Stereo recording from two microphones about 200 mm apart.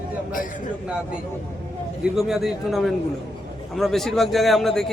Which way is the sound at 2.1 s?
Centre (ahead or behind).